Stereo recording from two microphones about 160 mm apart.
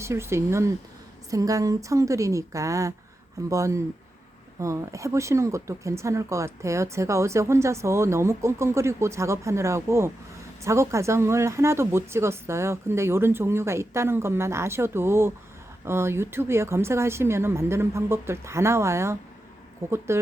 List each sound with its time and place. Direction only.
0.0 s a woman's voice: 15° right (ahead or behind)